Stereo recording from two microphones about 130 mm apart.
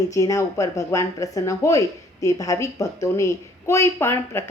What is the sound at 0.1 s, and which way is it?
A woman's voice, 25° left (ahead or behind).